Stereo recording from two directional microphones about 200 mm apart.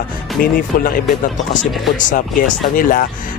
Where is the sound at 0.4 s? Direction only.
45° left (ahead or behind).